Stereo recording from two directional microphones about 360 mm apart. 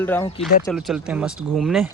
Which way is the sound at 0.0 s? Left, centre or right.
Centre.